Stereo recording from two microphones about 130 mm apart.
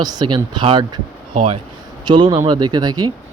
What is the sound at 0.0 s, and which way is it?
Speech, 30° right (ahead or behind).